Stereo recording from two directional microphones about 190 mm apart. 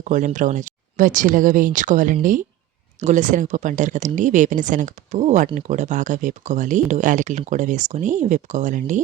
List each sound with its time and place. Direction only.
0.0 s speech: 40° right (ahead or behind)